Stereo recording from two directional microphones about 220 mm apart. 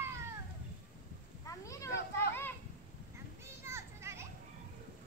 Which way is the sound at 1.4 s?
15° left (ahead or behind).